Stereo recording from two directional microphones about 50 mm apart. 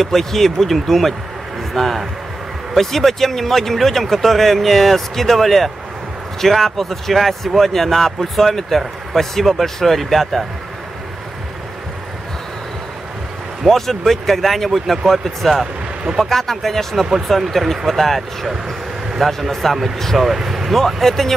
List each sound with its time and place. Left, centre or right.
0.0 s speech: centre
13.7 s speech: centre
15.6 s a sound: centre
16.2 s speech: centre
17.0 s speech: centre